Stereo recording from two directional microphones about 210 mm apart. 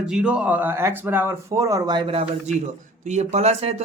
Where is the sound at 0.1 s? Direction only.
5° right (ahead or behind).